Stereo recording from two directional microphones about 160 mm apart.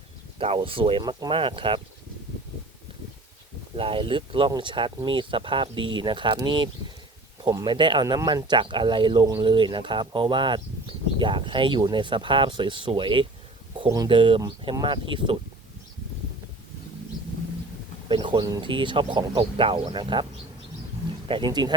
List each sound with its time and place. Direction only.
0.3 s speech: 35° right (ahead or behind)
3.8 s speech: 35° right (ahead or behind)
18.1 s a sound: 30° right (ahead or behind)
18.7 s speech: 30° right (ahead or behind)
21.2 s speech: 30° right (ahead or behind)